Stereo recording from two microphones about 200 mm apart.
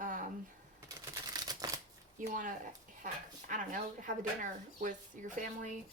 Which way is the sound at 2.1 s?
40° right (ahead or behind).